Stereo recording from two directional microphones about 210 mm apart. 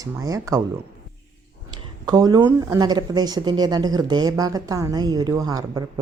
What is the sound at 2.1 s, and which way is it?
Speech, 20° right (ahead or behind).